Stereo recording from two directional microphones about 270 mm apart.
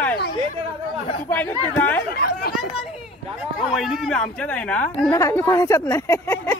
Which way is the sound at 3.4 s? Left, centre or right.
Centre.